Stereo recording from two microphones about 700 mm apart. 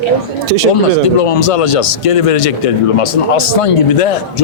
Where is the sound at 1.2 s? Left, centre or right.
Left.